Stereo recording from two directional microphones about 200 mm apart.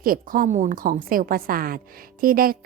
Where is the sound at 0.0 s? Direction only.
45° right (ahead or behind).